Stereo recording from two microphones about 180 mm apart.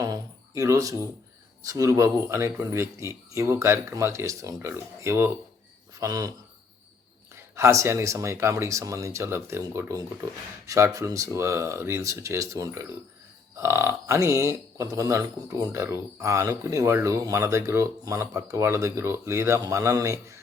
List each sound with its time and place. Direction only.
0.0 s a sound: 20° right (ahead or behind)
1.6 s a man's voice: 20° right (ahead or behind)
7.5 s a man's voice: 15° right (ahead or behind)